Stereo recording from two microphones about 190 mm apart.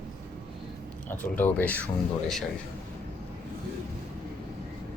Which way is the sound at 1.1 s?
10° left (ahead or behind).